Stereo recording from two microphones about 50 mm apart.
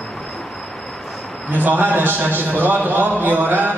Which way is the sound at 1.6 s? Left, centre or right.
Right.